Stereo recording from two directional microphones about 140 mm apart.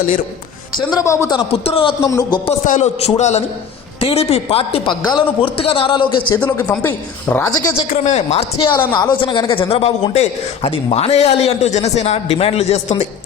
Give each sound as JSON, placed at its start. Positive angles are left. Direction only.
{"t": 1.0, "sound": "a man's voice", "side_deg": 20}
{"t": 1.5, "sound": "a woman's voice", "side_deg": 45}
{"t": 2.0, "sound": "a man's voice", "side_deg": 25}
{"t": 2.6, "sound": "a man's voice", "side_deg": 55}
{"t": 6.4, "sound": "a woman's voice", "side_deg": 15}
{"t": 7.8, "sound": "a woman's voice", "side_deg": 55}
{"t": 8.5, "sound": "a woman's voice", "side_deg": 35}